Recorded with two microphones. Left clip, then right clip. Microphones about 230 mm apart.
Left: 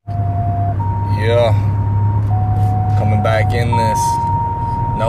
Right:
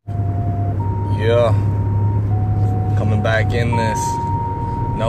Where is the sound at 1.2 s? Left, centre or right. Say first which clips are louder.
Left 1 dB; centre.